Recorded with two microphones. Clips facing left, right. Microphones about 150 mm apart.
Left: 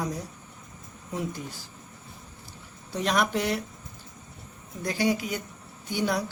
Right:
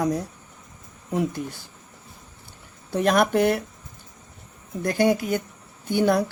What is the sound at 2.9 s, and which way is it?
Speech, 55° right (ahead or behind).